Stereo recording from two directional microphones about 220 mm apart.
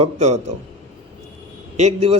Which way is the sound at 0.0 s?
30° right (ahead or behind).